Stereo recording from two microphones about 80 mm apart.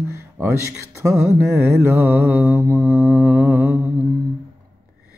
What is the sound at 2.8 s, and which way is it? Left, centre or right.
Mantra, centre.